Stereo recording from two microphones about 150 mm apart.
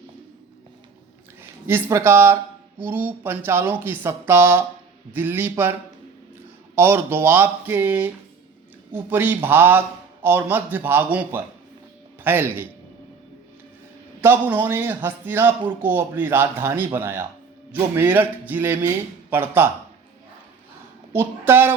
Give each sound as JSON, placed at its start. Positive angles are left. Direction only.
{"t": 1.4, "sound": "speech", "side_deg": -15}
{"t": 6.7, "sound": "speech", "side_deg": -15}
{"t": 14.2, "sound": "speech", "side_deg": -15}
{"t": 21.1, "sound": "a woman's voice", "side_deg": -15}